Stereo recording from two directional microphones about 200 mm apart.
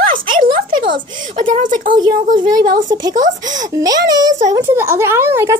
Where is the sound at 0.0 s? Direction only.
45° right (ahead or behind).